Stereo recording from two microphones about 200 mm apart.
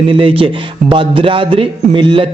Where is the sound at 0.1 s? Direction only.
25° right (ahead or behind).